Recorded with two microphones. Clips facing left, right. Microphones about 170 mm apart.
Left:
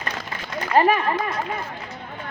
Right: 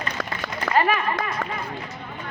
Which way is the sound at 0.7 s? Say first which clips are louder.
Left 3 dB; 75° right (ahead or behind).